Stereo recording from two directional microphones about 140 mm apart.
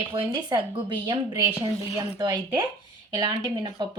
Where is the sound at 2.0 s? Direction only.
30° right (ahead or behind).